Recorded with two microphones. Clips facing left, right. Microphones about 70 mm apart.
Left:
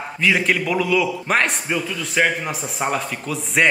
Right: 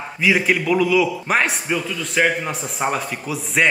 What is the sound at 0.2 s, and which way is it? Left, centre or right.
A man's voice, centre.